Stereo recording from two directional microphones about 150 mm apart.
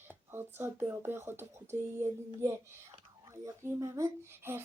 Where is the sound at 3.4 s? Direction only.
20° right (ahead or behind).